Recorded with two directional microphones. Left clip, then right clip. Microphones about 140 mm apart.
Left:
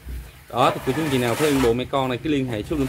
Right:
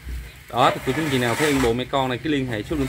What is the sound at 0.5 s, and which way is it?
Speech, 5° left (ahead or behind).